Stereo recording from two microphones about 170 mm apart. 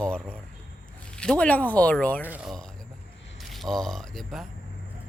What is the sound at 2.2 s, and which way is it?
Speech, 10° right (ahead or behind).